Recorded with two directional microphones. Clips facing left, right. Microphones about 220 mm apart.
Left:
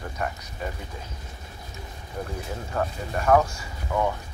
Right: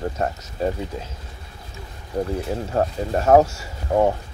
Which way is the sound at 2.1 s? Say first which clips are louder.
Right 9 dB; 40° right (ahead or behind).